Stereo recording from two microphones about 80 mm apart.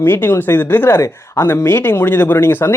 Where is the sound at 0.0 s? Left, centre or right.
Left.